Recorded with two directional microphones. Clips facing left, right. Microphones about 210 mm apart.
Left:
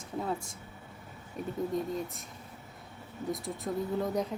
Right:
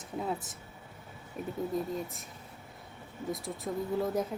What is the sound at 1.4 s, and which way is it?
Speech, 5° right (ahead or behind).